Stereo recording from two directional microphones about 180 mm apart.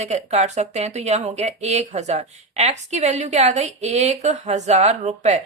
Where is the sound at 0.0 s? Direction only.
40° right (ahead or behind).